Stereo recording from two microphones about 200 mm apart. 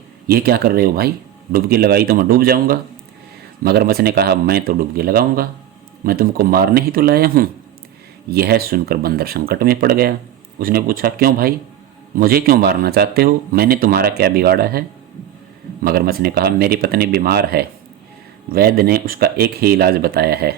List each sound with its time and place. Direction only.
0.3 s speech: 50° right (ahead or behind)